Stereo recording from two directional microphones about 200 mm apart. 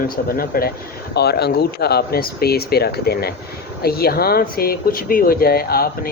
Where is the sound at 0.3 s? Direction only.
45° left (ahead or behind).